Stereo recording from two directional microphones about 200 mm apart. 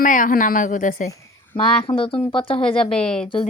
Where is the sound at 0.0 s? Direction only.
40° left (ahead or behind).